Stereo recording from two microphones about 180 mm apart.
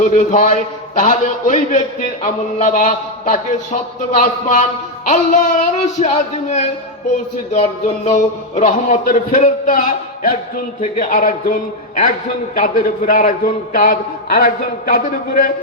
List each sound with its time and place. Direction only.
0.0 s a man's voice: 45° left (ahead or behind)
7.5 s a man's voice: 35° left (ahead or behind); by 15.5 s 55° left (ahead or behind)